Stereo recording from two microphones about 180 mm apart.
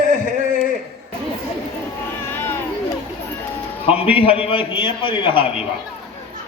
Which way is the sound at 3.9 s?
30° left (ahead or behind).